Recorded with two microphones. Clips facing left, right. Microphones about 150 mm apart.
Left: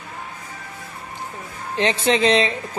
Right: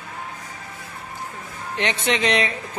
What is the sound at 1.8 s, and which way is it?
Speech, 30° left (ahead or behind).